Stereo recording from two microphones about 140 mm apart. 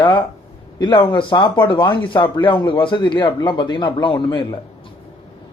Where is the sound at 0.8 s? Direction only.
30° left (ahead or behind).